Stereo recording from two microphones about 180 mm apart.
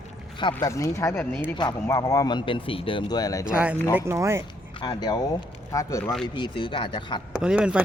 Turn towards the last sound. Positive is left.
turn(degrees=-5)  # may be behind; listen again after turning